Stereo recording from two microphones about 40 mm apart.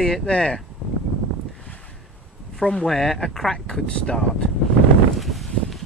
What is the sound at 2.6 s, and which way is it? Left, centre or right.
Speech, left.